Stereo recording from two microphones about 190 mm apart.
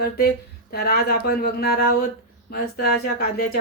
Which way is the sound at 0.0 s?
55° left (ahead or behind).